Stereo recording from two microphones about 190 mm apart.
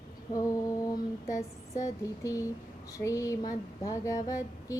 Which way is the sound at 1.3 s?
15° left (ahead or behind).